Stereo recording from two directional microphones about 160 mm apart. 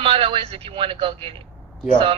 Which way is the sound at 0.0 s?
35° right (ahead or behind).